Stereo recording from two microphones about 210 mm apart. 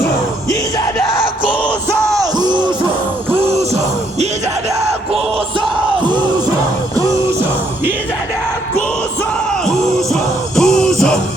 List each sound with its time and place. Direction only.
2.0 s yell: centre (ahead or behind)
2.4 s music: 20° right (ahead or behind)
3.3 s gasp: 30° right (ahead or behind)
5.5 s music: 25° right (ahead or behind)
10.6 s music: 5° left (ahead or behind)